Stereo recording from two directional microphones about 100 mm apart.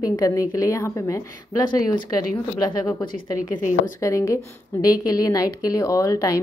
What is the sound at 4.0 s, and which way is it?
A woman's voice, 30° left (ahead or behind).